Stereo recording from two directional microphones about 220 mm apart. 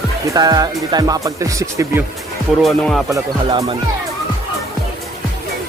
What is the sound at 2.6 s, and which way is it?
Speech, centre (ahead or behind).